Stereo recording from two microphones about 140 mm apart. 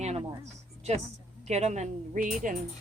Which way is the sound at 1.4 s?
50° right (ahead or behind).